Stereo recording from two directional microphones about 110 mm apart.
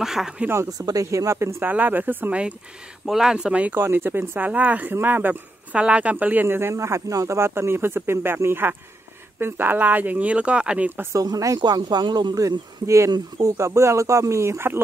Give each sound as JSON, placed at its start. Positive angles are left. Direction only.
{"t": 0.0, "sound": "speech", "side_deg": -5}
{"t": 0.5, "sound": "speech", "side_deg": -30}
{"t": 11.1, "sound": "speech", "side_deg": -35}